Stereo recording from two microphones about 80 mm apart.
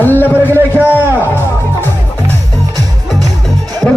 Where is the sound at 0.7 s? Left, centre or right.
Right.